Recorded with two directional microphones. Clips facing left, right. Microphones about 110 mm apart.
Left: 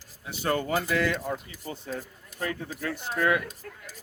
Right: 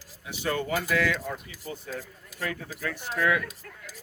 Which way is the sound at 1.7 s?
30° left (ahead or behind).